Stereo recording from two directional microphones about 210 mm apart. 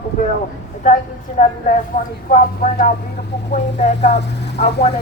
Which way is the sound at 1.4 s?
35° left (ahead or behind).